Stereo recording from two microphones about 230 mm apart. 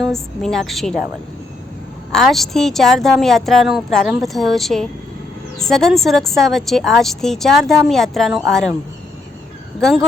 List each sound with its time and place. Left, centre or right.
0.0 s a woman's voice: centre
2.1 s a woman's voice: centre